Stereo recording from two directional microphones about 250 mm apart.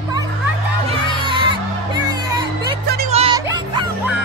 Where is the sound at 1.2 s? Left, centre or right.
Centre.